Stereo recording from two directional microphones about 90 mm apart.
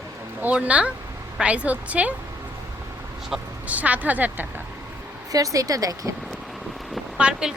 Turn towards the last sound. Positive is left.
turn(degrees=-10)  # may be behind; listen again after turning